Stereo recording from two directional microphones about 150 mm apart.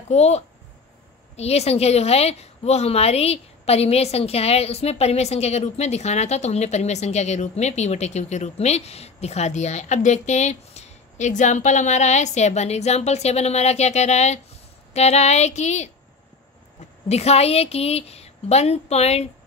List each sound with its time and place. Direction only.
0.1 s a woman's voice: 45° left (ahead or behind)
17.1 s a woman's voice: 45° left (ahead or behind)